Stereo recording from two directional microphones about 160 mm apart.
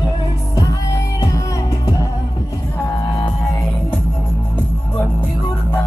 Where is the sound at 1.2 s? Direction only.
20° left (ahead or behind).